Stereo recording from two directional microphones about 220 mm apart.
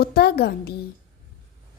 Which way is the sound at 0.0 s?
45° left (ahead or behind).